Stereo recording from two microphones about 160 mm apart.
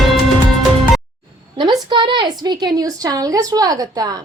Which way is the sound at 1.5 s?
30° right (ahead or behind).